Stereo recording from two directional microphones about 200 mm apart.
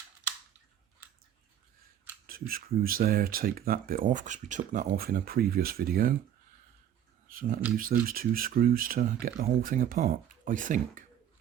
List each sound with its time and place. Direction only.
2.2 s speech: 45° right (ahead or behind)
7.3 s a sound: 45° right (ahead or behind)
7.8 s speech: 45° right (ahead or behind)